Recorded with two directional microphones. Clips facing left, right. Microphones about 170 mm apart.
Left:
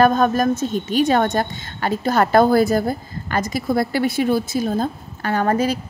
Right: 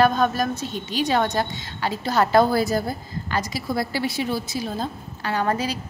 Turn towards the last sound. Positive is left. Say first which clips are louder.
# left 5 dB
turn(degrees=50)  # may be behind; listen again after turning